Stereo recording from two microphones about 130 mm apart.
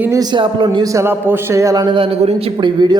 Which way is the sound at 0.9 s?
20° right (ahead or behind).